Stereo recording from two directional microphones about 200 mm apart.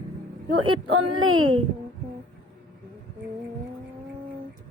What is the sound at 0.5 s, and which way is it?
Speech, 90° right.